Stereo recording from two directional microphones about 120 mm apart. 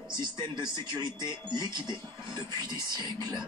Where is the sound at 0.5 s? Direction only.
35° right (ahead or behind).